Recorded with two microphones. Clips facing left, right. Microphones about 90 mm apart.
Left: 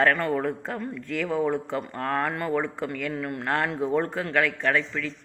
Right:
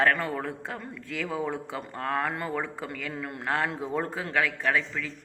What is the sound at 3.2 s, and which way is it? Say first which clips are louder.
Speech: even; 20° right (ahead or behind).